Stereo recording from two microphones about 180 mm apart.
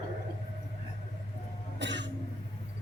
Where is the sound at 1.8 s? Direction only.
75° right (ahead or behind).